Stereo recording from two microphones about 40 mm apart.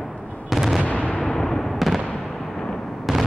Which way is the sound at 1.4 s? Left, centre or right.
Centre.